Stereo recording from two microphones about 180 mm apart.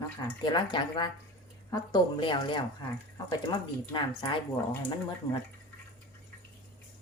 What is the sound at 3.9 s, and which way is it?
Speech, 25° left (ahead or behind).